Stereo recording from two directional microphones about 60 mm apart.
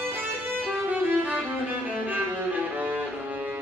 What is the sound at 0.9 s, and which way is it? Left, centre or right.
Music, right.